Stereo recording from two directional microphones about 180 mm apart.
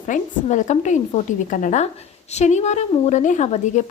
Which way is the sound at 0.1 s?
45° left (ahead or behind).